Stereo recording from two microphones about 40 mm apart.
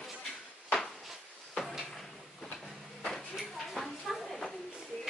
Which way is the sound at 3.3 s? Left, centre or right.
Centre.